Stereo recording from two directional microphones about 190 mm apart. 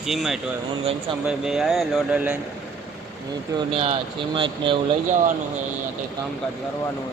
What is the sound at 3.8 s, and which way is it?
Speech, 25° right (ahead or behind).